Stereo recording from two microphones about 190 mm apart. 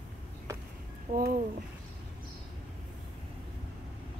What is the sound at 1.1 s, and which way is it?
Speech, 50° right (ahead or behind).